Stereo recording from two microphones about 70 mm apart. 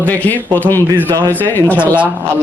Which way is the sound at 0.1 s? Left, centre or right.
Left.